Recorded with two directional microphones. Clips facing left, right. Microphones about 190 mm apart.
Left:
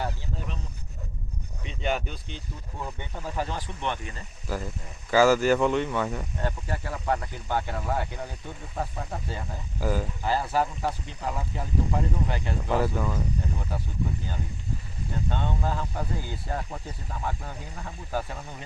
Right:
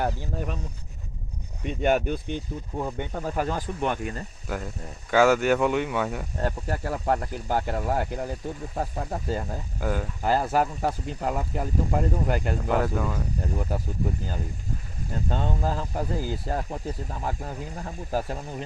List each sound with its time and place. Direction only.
0.0 s speech: 50° right (ahead or behind)
1.6 s speech: 50° right (ahead or behind)
5.1 s speech: centre (ahead or behind)
6.4 s speech: 45° right (ahead or behind)
9.8 s speech: 5° left (ahead or behind)
10.2 s speech: 45° right (ahead or behind)
12.6 s speech: centre (ahead or behind)
13.6 s speech: 40° right (ahead or behind)